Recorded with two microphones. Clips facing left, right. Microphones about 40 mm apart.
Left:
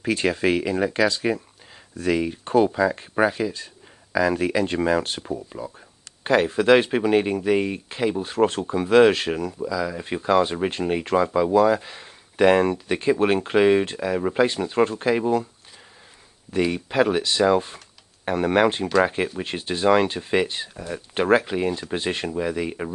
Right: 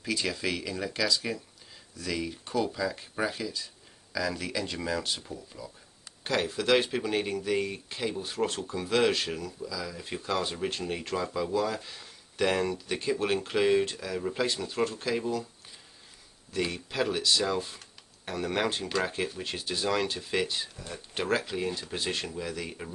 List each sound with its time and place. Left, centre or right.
0.0 s speech: left
6.2 s speech: left
9.8 s speech: left
16.7 s speech: left